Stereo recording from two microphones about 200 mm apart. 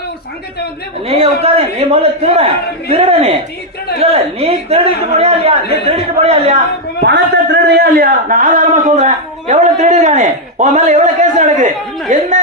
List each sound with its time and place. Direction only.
1.0 s a man's voice: 30° right (ahead or behind)
7.0 s a man's voice: 60° right (ahead or behind); by 12.2 s 35° right (ahead or behind)